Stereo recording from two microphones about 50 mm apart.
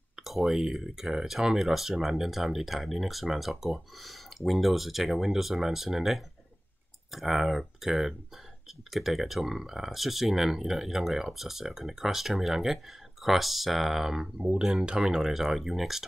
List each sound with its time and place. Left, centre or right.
0.1 s speech: centre